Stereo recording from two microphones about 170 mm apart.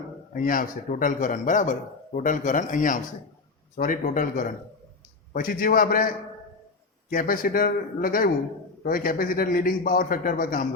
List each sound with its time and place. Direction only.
0.3 s a man's voice: 55° left (ahead or behind)
7.1 s a man's voice: 55° left (ahead or behind)